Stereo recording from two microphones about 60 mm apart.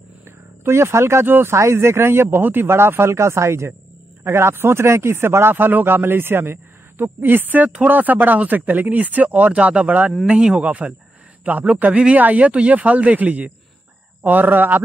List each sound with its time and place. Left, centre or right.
0.7 s a man's voice: right